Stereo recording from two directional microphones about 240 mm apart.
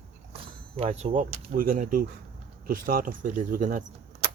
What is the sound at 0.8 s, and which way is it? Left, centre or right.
Speech, right.